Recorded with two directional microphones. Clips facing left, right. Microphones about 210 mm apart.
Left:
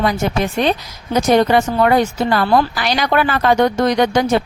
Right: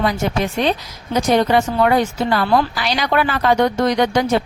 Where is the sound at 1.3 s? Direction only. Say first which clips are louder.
Left 2 dB; 50° left (ahead or behind).